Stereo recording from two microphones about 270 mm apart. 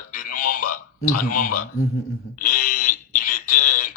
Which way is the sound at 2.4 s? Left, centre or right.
Left.